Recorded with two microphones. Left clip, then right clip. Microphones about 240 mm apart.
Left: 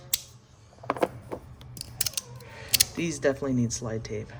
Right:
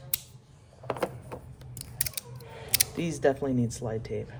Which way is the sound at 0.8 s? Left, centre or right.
Centre.